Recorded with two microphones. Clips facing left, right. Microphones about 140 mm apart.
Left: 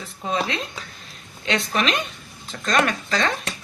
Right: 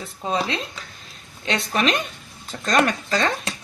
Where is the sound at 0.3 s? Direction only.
30° right (ahead or behind).